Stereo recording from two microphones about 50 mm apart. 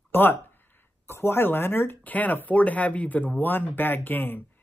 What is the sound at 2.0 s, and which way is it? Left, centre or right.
Speech, left.